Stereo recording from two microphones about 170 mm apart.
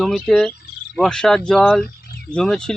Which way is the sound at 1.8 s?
70° left (ahead or behind).